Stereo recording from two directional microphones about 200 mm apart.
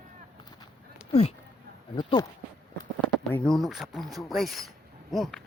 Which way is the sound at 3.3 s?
5° left (ahead or behind).